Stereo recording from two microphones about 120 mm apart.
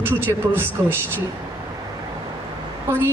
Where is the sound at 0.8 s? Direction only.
30° right (ahead or behind).